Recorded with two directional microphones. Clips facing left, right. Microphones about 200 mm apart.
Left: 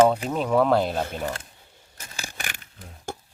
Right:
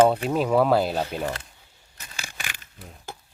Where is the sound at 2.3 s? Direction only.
45° left (ahead or behind).